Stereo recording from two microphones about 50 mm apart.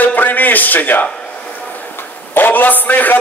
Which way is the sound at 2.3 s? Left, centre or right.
Left.